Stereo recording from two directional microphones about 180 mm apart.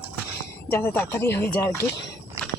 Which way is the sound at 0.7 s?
10° left (ahead or behind).